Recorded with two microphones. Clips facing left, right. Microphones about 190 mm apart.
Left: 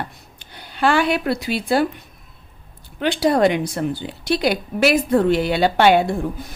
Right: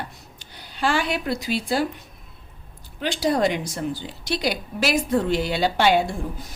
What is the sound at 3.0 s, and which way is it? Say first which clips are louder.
A woman's voice: left 5 dB; 60° left (ahead or behind).